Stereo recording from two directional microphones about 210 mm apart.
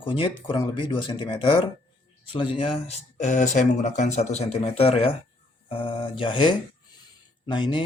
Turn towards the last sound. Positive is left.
turn(degrees=20)  # may be behind; listen again after turning